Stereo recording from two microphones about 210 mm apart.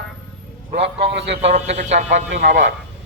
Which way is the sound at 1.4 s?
30° right (ahead or behind).